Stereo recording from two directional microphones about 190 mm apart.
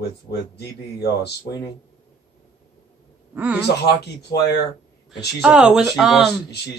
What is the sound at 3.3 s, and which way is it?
Speech, 10° right (ahead or behind).